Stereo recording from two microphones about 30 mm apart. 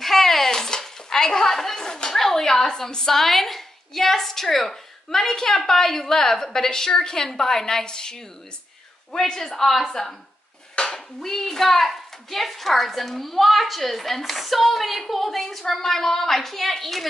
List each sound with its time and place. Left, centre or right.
0.0 s chopping: centre
0.5 s stir: centre
2.1 s a woman's voice: centre
9.2 s a woman's voice: centre